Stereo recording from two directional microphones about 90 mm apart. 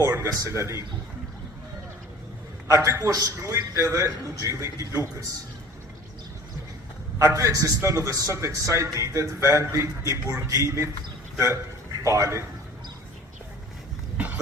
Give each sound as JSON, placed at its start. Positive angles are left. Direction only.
{"t": 0.0, "sound": "a man's voice", "side_deg": -35}
{"t": 2.6, "sound": "a man's voice", "side_deg": -40}
{"t": 7.2, "sound": "a man's voice", "side_deg": -35}